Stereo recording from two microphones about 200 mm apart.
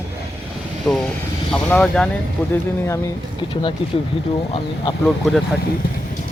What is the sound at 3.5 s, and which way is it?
Speech, 25° left (ahead or behind).